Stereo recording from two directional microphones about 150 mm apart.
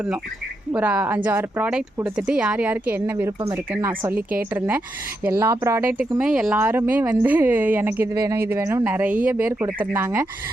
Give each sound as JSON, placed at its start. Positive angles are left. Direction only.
{"t": 0.8, "sound": "speech", "side_deg": -10}
{"t": 5.9, "sound": "speech", "side_deg": -10}